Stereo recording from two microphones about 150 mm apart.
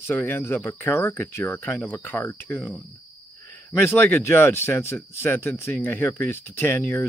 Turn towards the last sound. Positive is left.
turn(degrees=15)  # may be behind; listen again after turning